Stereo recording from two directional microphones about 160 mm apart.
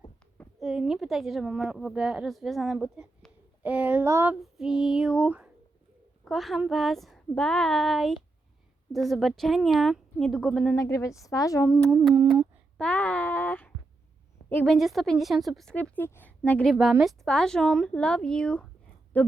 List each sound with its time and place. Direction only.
0.6 s speech: centre (ahead or behind)
4.4 s speech: 5° right (ahead or behind)
10.8 s a woman's voice: 20° left (ahead or behind)
12.7 s a sound: 10° left (ahead or behind)
14.5 s speech: 5° left (ahead or behind)